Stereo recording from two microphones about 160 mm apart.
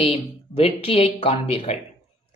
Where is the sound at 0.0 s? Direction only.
35° left (ahead or behind).